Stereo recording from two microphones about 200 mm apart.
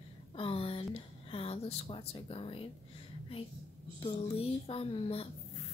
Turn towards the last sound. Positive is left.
turn(degrees=30)  # may be behind; listen again after turning